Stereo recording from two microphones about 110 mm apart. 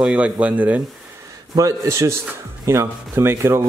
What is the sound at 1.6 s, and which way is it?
A man's voice, 30° right (ahead or behind).